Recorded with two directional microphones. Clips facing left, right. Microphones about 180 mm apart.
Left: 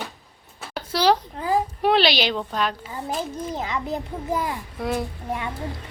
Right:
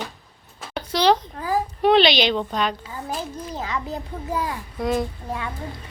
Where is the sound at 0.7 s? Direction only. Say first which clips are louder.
Right 1 dB; 5° left (ahead or behind).